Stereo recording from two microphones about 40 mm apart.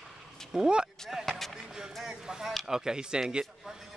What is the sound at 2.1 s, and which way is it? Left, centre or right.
Speech, centre.